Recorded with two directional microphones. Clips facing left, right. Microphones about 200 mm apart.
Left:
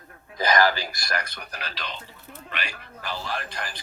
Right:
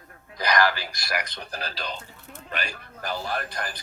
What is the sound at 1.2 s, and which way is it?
Speech, 20° right (ahead or behind).